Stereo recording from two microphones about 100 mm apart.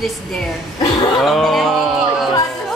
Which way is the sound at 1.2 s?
Centre (ahead or behind).